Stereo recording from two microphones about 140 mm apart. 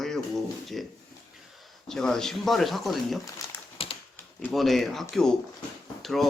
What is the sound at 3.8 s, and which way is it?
Typing, 40° left (ahead or behind).